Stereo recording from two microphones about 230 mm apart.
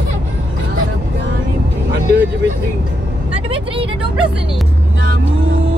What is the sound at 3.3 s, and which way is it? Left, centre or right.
Speech, right.